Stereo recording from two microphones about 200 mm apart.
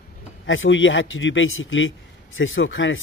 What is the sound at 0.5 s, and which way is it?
A man's voice, 70° left (ahead or behind).